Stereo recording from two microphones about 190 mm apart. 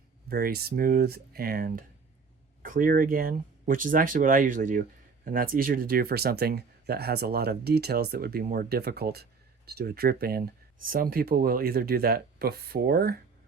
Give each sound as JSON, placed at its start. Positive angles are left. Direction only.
{"t": 0.3, "sound": "speech", "side_deg": -55}